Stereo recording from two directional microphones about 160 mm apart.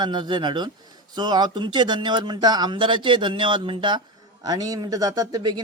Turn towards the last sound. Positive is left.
turn(degrees=-25)  # may be behind; listen again after turning